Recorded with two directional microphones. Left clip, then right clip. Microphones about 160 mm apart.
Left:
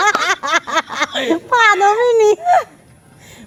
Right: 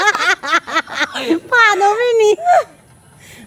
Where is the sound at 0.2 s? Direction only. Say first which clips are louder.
Right 1 dB; centre (ahead or behind).